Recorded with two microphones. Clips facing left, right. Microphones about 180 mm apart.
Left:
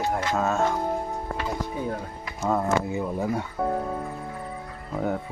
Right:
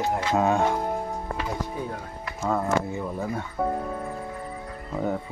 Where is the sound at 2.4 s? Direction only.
10° left (ahead or behind).